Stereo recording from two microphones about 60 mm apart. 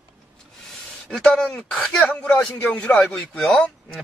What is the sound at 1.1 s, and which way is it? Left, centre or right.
Speech, centre.